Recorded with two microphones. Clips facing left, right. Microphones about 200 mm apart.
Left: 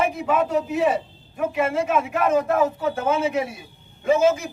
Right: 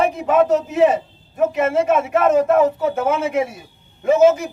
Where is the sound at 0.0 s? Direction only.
45° right (ahead or behind).